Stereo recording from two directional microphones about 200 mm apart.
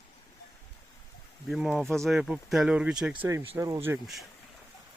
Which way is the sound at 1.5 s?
Centre (ahead or behind).